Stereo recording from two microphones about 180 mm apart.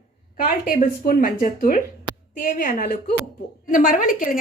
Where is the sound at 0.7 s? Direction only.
50° left (ahead or behind).